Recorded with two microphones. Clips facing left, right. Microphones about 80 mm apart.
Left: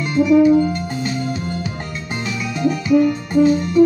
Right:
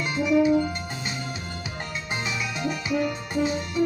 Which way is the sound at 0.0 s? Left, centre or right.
Centre.